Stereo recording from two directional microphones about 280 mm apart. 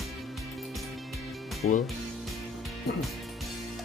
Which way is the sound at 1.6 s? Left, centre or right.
Left.